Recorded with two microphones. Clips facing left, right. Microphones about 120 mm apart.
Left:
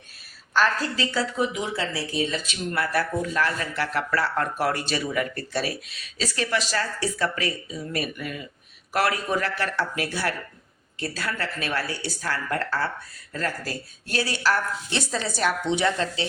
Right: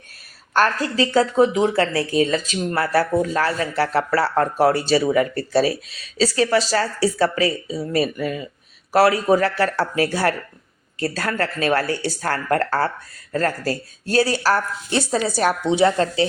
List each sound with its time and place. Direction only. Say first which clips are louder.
0.5 s speech: right 4 dB; 45° right (ahead or behind)